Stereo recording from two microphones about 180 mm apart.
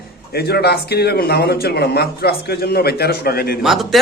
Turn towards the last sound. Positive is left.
turn(degrees=0)  # may be behind; listen again after turning